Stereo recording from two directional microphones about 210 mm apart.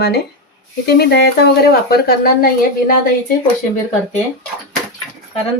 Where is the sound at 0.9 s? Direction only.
50° left (ahead or behind).